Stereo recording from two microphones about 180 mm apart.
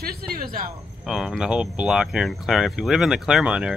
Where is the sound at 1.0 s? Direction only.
Centre (ahead or behind).